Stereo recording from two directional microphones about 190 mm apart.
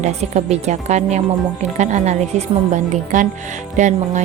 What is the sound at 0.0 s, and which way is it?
A woman's voice, 35° right (ahead or behind).